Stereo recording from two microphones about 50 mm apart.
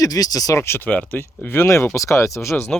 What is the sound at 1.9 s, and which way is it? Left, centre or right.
Speech, left.